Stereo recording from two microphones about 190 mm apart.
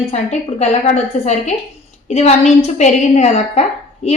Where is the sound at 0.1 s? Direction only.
35° left (ahead or behind).